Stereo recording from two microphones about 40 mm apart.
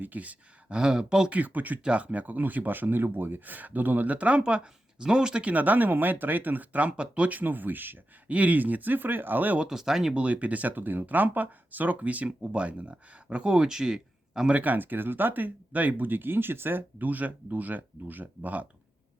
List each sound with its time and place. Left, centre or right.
0.0 s speech: right
0.7 s speech: centre
1.3 s speech: right
1.8 s speech: right
5.5 s speech: right
6.9 s speech: right
7.3 s speech: right
8.3 s speech: right
9.6 s speech: centre
10.2 s speech: right
12.4 s speech: right
13.3 s speech: right
14.5 s speech: right
17.1 s speech: right